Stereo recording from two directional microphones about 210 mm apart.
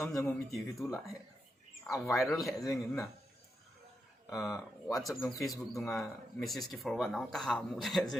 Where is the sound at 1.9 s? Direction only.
Centre (ahead or behind).